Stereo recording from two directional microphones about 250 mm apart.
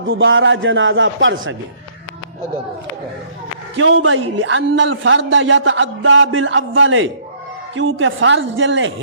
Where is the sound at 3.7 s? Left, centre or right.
Right.